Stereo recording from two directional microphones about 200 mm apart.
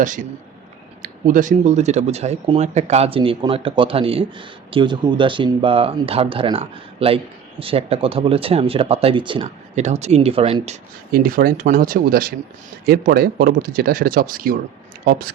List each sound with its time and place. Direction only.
1.0 s speech: 40° right (ahead or behind)
11.1 s speech: 45° right (ahead or behind)